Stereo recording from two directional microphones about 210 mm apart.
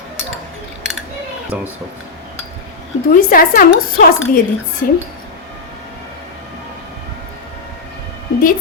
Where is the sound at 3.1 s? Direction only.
40° left (ahead or behind).